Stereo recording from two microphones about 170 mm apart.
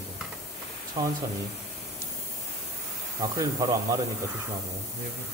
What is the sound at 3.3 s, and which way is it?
Speech, 20° right (ahead or behind).